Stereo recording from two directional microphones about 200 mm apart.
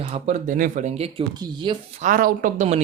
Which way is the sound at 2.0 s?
45° right (ahead or behind).